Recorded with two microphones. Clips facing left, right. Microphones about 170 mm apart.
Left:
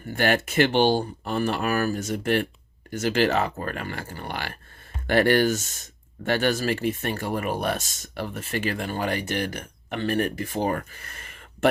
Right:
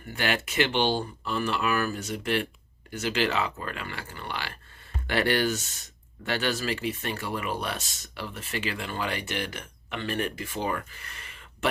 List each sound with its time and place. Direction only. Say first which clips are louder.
0.2 s speech: left 6 dB; 45° left (ahead or behind)